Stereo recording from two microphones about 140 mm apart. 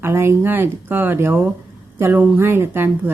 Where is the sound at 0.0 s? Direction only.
15° right (ahead or behind).